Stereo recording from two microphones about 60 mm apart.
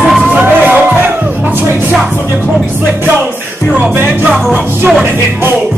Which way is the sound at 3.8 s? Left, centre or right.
Centre.